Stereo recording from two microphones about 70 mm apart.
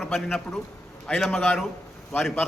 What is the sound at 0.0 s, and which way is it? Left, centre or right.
A man's voice, centre.